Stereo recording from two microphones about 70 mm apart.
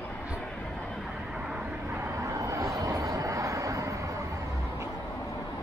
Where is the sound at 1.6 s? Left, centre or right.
Right.